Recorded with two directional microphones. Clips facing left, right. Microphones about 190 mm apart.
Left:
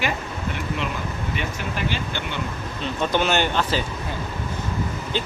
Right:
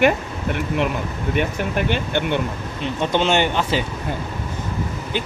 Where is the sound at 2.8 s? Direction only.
20° right (ahead or behind).